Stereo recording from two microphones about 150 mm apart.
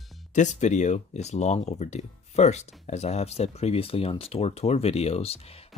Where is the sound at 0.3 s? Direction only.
55° left (ahead or behind).